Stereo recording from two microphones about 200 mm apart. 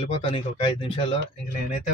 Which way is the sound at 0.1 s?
25° left (ahead or behind).